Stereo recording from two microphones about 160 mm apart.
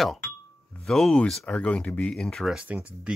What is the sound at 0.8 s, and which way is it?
Speech, centre (ahead or behind).